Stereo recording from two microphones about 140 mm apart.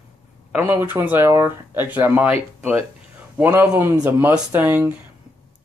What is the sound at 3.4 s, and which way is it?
Speech, 10° right (ahead or behind).